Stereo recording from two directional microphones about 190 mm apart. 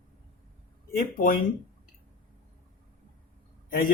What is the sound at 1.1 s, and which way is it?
Speech, 50° left (ahead or behind).